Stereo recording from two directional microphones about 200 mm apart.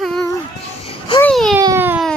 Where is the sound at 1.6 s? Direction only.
15° right (ahead or behind).